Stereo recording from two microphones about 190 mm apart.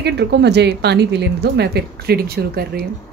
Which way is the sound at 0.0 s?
65° right (ahead or behind).